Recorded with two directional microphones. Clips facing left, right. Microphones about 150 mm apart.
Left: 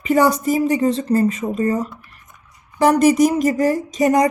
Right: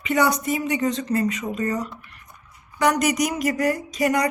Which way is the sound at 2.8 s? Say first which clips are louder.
Left 7 dB; 30° left (ahead or behind).